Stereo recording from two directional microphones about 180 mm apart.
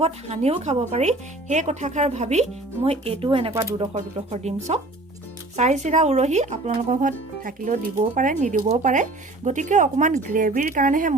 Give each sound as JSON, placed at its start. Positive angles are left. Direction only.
{"t": 0.0, "sound": "speech", "side_deg": -35}
{"t": 3.5, "sound": "speech", "side_deg": -15}
{"t": 3.9, "sound": "speech", "side_deg": -40}